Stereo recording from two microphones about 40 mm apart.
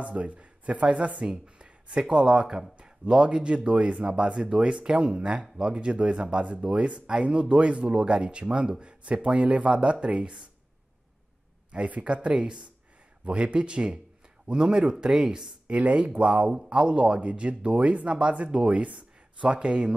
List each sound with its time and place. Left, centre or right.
0.0 s speech: right
12.0 s speech: right
15.6 s speech: right